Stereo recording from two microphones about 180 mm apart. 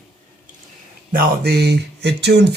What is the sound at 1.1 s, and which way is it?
Speech, 60° right (ahead or behind).